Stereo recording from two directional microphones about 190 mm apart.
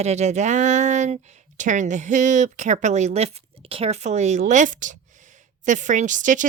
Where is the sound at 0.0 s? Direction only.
35° right (ahead or behind).